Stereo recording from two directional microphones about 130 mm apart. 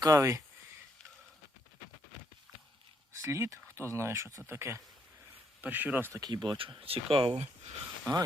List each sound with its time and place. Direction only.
0.0 s speech: 25° right (ahead or behind)
3.1 s speech: 20° right (ahead or behind)
6.1 s speech: 30° right (ahead or behind)